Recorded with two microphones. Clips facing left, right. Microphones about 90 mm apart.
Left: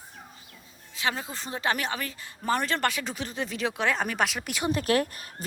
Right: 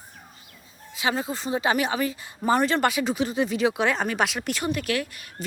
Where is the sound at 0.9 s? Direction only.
10° right (ahead or behind).